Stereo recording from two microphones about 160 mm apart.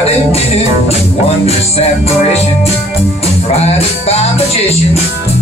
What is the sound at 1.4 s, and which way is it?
Music, 40° left (ahead or behind).